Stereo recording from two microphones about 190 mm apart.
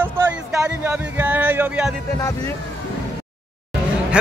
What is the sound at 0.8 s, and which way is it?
Music, 10° right (ahead or behind).